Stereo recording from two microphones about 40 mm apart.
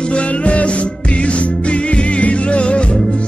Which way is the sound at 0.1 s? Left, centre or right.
Left.